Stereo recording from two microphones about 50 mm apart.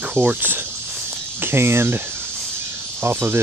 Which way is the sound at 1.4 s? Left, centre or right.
Right.